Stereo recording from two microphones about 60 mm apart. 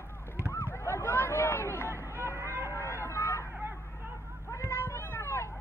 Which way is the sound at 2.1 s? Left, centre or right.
Right.